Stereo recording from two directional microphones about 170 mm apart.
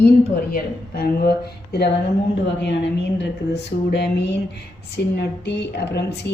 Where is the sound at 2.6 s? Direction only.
90° left.